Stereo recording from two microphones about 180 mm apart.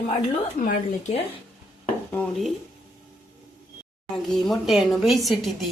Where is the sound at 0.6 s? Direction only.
40° left (ahead or behind).